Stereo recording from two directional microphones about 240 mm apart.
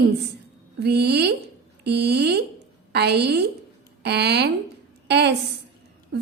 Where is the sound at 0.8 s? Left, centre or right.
Right.